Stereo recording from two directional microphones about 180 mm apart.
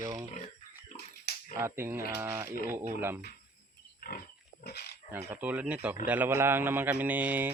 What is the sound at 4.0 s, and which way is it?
Pig, 55° left (ahead or behind).